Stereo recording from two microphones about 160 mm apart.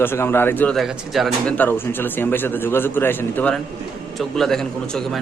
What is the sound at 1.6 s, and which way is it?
A man's voice, 15° left (ahead or behind).